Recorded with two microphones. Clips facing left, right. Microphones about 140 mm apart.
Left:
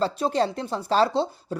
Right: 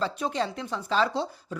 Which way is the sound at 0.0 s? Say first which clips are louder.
Left 5 dB; 35° left (ahead or behind).